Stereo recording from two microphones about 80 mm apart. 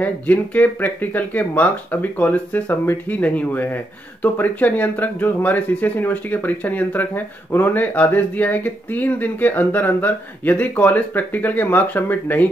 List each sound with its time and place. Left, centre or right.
0.0 s speech: centre